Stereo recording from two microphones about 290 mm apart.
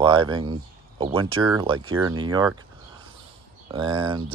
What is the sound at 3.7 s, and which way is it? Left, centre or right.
Speech, centre.